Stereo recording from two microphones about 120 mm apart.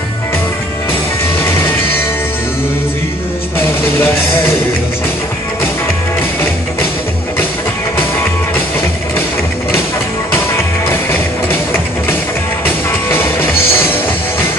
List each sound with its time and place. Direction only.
10.9 s music: 20° left (ahead or behind)
13.1 s music: 20° left (ahead or behind)